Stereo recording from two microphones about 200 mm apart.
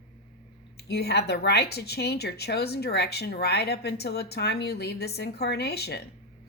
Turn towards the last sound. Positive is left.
turn(degrees=55)  # may be behind; listen again after turning